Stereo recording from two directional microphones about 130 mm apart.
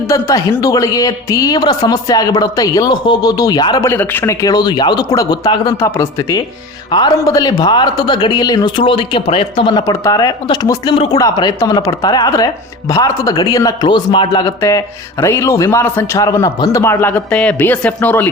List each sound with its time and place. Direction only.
0.1 s a man's voice: 25° left (ahead or behind)
3.8 s a man's voice: 15° left (ahead or behind); by 5.7 s 30° left (ahead or behind)
5.7 s a man's voice: 20° left (ahead or behind)
6.9 s speech: 35° left (ahead or behind)
10.8 s speech: 45° left (ahead or behind)
11.1 s a man's voice: 35° left (ahead or behind)
14.4 s a man's voice: 25° left (ahead or behind)